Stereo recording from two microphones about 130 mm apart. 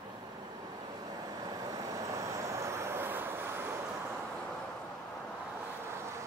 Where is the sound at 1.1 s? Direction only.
30° right (ahead or behind).